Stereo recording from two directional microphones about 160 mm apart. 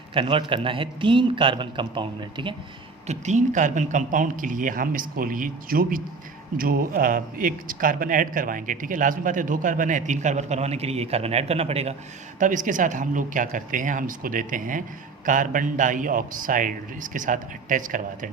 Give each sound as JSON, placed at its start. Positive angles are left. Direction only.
{"t": 0.1, "sound": "a man's voice", "side_deg": -30}
{"t": 3.1, "sound": "speech", "side_deg": -50}
{"t": 12.4, "sound": "speech", "side_deg": -55}